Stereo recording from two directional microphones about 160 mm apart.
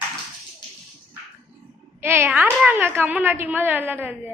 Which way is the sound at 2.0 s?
15° right (ahead or behind).